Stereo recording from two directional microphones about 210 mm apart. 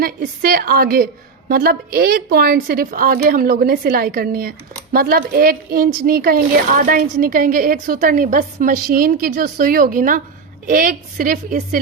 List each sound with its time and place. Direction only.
0.0 s a woman's voice: 45° right (ahead or behind)